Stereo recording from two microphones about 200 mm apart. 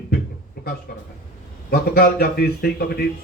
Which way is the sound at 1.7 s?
50° left (ahead or behind).